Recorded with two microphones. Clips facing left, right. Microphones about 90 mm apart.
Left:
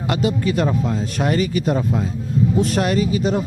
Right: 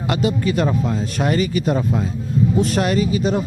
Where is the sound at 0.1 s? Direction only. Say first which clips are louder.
Even; 15° right (ahead or behind).